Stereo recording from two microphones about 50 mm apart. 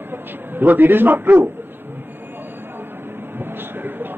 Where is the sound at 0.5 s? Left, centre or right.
Right.